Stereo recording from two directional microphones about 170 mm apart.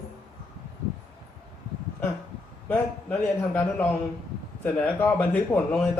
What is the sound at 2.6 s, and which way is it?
Speech, 10° left (ahead or behind).